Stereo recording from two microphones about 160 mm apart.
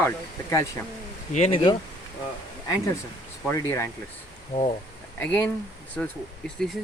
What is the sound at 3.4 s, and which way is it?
Speech, 15° left (ahead or behind).